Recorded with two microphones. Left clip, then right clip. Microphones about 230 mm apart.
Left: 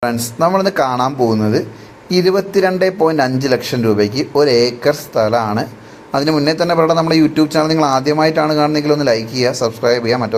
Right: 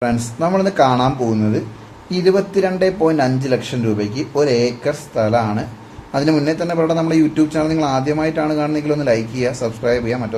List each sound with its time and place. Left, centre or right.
0.0 s a man's voice: centre